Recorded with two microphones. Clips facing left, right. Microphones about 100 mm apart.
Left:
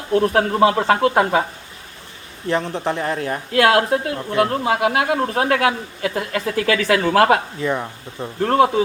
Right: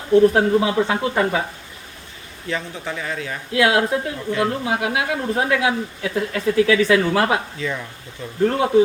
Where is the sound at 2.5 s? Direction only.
65° left (ahead or behind).